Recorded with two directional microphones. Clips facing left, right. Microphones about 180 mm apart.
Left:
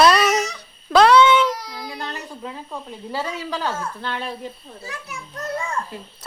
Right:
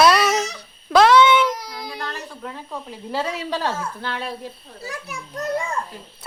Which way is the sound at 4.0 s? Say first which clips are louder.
Even; 5° right (ahead or behind).